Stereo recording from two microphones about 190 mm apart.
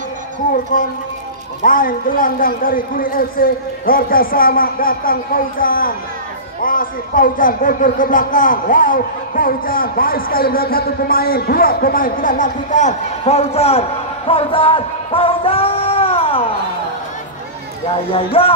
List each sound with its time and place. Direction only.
1.6 s speech: 45° left (ahead or behind); by 16.4 s 30° left (ahead or behind)
18.1 s music: 30° left (ahead or behind)